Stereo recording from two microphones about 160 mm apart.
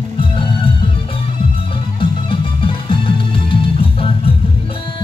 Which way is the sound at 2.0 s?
30° left (ahead or behind).